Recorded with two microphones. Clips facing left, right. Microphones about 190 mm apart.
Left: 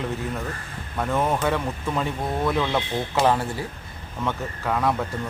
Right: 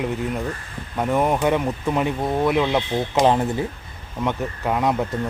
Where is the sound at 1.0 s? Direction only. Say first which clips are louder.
Right 3 dB; 15° right (ahead or behind).